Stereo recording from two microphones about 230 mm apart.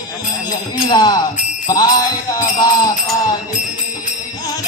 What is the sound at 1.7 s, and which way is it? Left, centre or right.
Music, centre.